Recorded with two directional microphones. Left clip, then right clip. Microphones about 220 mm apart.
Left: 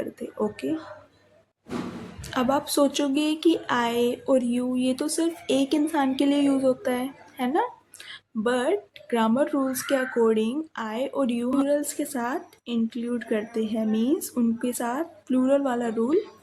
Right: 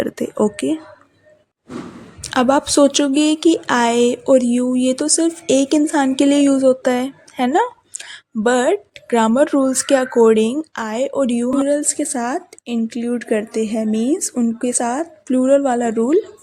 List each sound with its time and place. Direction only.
0.2 s speech: 40° right (ahead or behind)
2.2 s speech: 40° right (ahead or behind)